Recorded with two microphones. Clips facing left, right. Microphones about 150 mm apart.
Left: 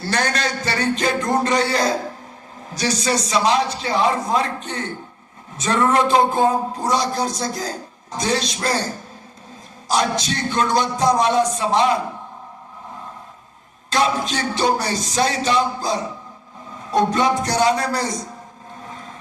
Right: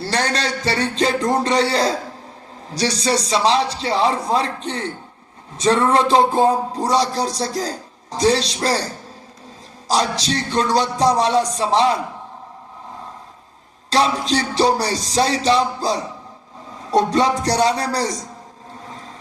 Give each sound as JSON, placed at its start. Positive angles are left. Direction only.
{"t": 0.0, "sound": "a man's voice", "side_deg": -30}
{"t": 9.9, "sound": "a man's voice", "side_deg": -35}
{"t": 13.9, "sound": "a man's voice", "side_deg": -35}